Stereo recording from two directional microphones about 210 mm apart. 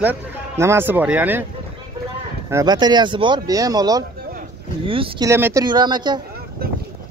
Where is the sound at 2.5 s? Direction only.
20° right (ahead or behind).